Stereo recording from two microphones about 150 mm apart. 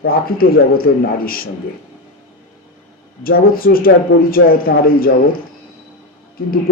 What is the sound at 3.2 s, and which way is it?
Speech, 75° left (ahead or behind).